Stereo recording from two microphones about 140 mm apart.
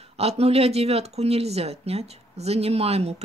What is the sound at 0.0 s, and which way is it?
Speech, 45° right (ahead or behind).